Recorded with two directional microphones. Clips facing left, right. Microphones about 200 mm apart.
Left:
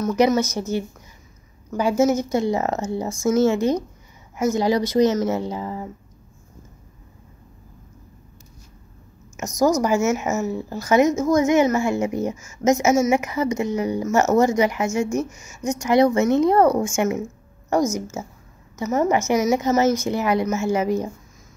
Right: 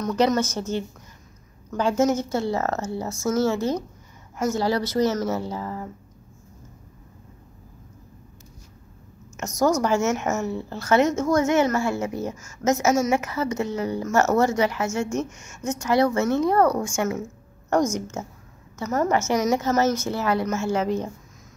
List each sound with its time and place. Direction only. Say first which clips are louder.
0.0 s a woman's voice: left 3 dB; 10° left (ahead or behind)
9.6 s a woman's voice: left 2 dB; 10° left (ahead or behind)
17.6 s a woman's voice: left 1 dB; 10° left (ahead or behind)